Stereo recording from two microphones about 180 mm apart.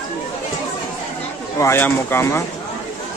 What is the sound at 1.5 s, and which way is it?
Speech, 15° left (ahead or behind).